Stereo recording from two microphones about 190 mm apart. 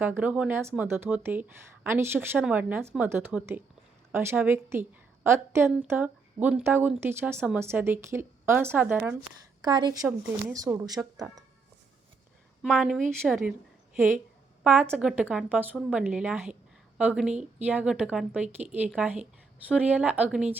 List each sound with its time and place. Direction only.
0.0 s a woman's voice: 10° right (ahead or behind)
9.6 s speech: 20° right (ahead or behind)
12.6 s a woman's voice: centre (ahead or behind)